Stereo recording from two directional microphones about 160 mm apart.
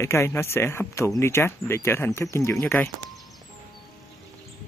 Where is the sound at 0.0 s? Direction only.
15° left (ahead or behind).